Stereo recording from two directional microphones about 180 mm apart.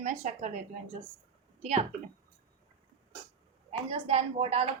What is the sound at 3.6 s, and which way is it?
Speech, 35° right (ahead or behind).